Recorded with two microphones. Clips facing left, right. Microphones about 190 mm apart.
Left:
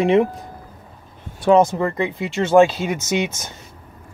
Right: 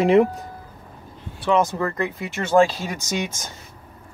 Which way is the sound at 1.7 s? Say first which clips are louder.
Left 3 dB; 20° left (ahead or behind).